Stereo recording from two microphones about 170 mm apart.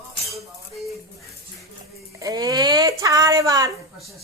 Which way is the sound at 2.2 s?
20° right (ahead or behind).